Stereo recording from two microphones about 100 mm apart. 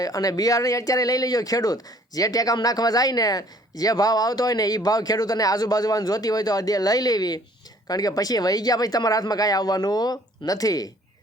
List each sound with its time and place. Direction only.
0.0 s speech: 35° left (ahead or behind)